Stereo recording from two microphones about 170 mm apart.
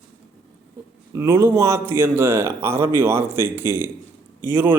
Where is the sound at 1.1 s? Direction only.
15° right (ahead or behind).